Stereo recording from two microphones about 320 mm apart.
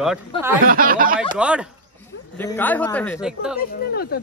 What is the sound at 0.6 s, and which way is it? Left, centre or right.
Speech, right.